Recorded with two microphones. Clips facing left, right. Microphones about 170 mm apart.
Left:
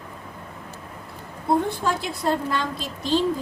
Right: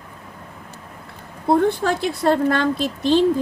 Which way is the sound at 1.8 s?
75° right (ahead or behind).